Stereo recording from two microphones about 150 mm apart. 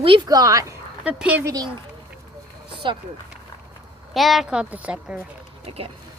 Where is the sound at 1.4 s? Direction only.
25° right (ahead or behind).